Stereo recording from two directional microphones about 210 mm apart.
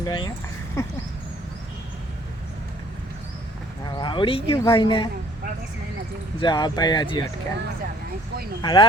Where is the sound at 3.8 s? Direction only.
20° left (ahead or behind).